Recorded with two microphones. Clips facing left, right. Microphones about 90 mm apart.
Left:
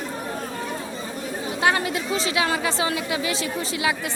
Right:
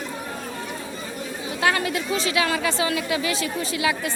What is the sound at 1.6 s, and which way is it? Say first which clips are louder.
A woman's voice: even; 20° left (ahead or behind).